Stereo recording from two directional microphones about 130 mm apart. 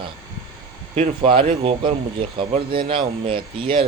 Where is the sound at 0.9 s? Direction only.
45° right (ahead or behind).